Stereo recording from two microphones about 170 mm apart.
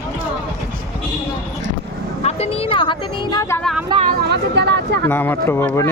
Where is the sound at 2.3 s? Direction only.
40° left (ahead or behind); by 3.6 s 15° left (ahead or behind).